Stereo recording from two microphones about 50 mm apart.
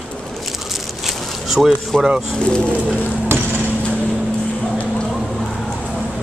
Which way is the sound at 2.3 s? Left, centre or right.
Left.